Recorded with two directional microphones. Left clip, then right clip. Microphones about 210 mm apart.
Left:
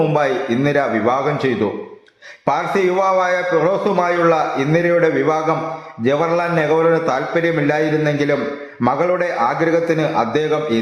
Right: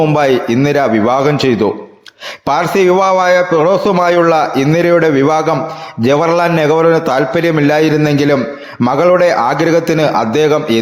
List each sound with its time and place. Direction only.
0.2 s a man's voice: 35° right (ahead or behind)
2.5 s a man's voice: 40° right (ahead or behind)